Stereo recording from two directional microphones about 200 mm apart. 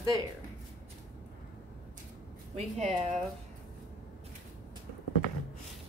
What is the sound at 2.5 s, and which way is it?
Speech, 35° right (ahead or behind).